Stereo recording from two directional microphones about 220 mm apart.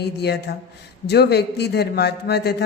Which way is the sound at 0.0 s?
50° left (ahead or behind).